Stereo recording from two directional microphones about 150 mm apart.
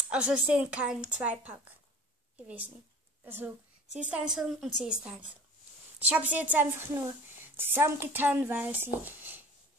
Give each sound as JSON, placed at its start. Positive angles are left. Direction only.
{"t": 0.1, "sound": "a woman's voice", "side_deg": -10}